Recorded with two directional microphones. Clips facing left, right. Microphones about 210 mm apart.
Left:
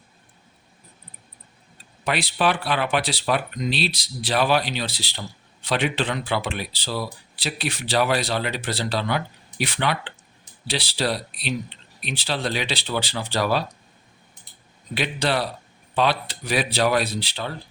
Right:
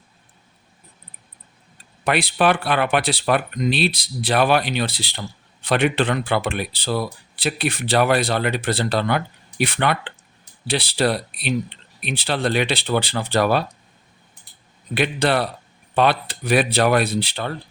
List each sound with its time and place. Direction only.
2.0 s speech: 55° right (ahead or behind)
14.9 s speech: 55° right (ahead or behind)